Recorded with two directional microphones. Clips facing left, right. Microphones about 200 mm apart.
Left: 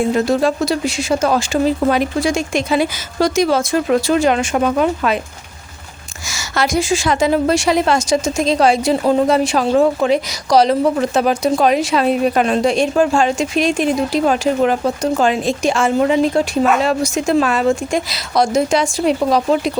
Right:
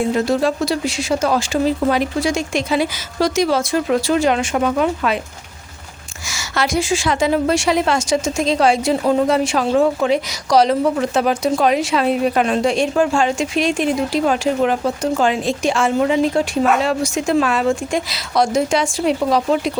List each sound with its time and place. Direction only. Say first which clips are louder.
0.1 s speech: left 2 dB; 50° left (ahead or behind)
6.2 s a woman's voice: left 2 dB; 40° left (ahead or behind)